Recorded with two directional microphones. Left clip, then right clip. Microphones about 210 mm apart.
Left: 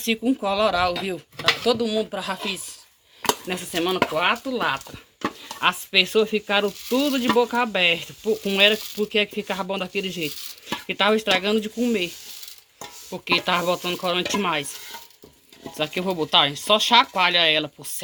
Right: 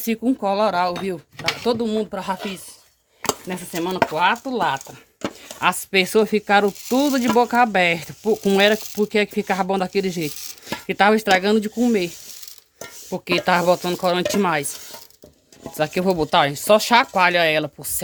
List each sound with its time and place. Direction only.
0.4 s speech: 55° right (ahead or behind)
13.1 s speech: 55° right (ahead or behind)
15.8 s speech: 55° right (ahead or behind)